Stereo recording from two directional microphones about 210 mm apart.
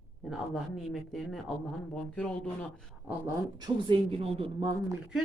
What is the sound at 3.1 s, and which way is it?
Speech, 15° right (ahead or behind).